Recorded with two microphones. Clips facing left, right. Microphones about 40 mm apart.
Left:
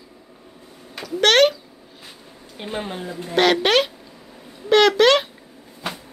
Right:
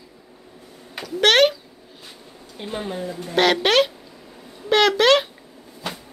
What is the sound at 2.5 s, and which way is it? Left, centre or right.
Speech, left.